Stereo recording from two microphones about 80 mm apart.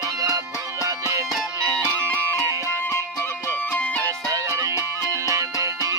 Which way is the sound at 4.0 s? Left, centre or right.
Right.